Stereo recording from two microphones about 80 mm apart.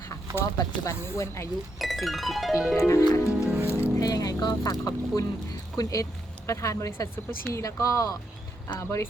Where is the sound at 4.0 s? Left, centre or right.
Left.